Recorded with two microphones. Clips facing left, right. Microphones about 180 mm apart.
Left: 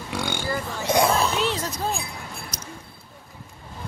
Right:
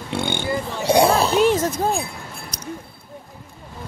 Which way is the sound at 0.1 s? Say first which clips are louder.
Right 4 dB; 25° right (ahead or behind).